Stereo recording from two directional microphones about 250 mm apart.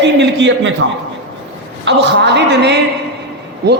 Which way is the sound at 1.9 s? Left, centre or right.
Right.